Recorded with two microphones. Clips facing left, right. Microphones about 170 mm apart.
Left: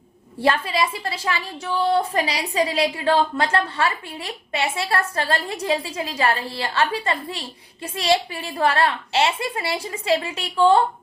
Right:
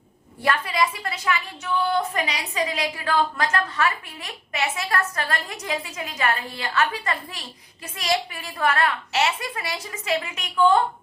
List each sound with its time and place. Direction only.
0.4 s a woman's voice: 30° left (ahead or behind)